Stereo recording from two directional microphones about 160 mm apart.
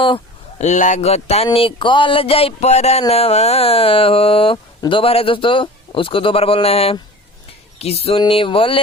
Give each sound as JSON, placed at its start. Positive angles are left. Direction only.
{"t": 0.6, "sound": "speech", "side_deg": 50}